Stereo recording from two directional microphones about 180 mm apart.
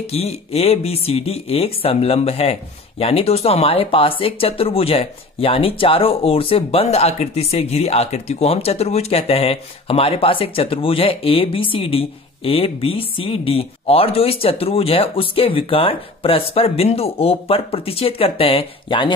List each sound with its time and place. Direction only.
0.0 s speech: 35° left (ahead or behind)